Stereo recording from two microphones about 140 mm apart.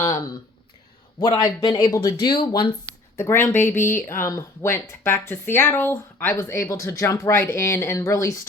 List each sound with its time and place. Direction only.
1.2 s speech: 30° left (ahead or behind)
3.2 s speech: 20° left (ahead or behind)